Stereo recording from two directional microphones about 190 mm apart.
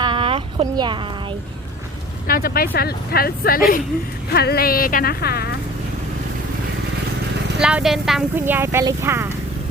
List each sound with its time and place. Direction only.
0.0 s a sound: 25° right (ahead or behind)
2.2 s speech: 50° left (ahead or behind)
7.6 s speech: 5° right (ahead or behind)